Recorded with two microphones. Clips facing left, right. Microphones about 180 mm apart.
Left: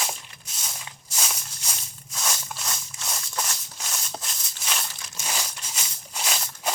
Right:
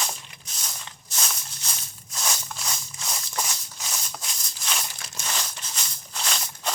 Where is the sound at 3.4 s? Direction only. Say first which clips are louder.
Right 1 dB; 5° right (ahead or behind).